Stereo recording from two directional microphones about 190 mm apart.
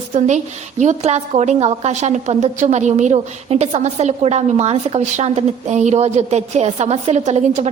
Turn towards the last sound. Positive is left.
turn(degrees=-40)  # may be behind; listen again after turning